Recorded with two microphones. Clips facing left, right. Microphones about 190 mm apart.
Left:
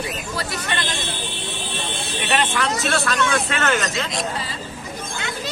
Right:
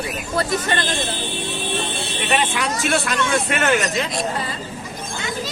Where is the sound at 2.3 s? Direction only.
10° right (ahead or behind).